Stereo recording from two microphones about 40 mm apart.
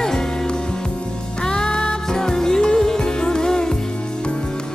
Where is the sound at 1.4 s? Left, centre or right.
Centre.